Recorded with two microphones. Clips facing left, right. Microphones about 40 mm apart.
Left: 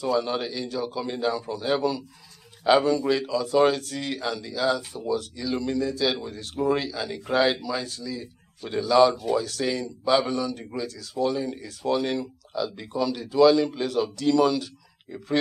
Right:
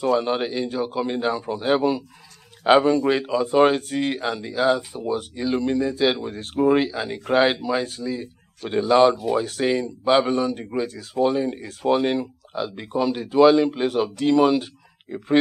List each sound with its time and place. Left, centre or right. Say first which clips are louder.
0.0 s speech: right 4 dB; right